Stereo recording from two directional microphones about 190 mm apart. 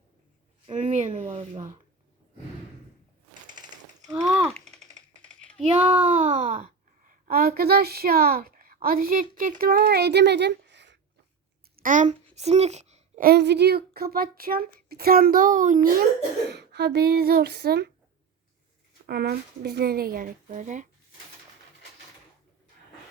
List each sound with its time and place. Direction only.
0.7 s speech: 40° right (ahead or behind)
3.4 s a sound: 25° right (ahead or behind)
4.4 s typing: 5° left (ahead or behind)
5.9 s a woman's voice: 40° right (ahead or behind); by 10.9 s 65° right (ahead or behind)
11.8 s speech: 45° right (ahead or behind)
12.3 s a sound: 35° right (ahead or behind)
13.2 s speech: 60° right (ahead or behind)
16.5 s speech: 60° right (ahead or behind)
19.0 s speech: 55° right (ahead or behind)